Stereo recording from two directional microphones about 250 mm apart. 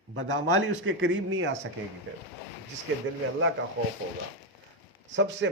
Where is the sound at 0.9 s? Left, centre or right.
Right.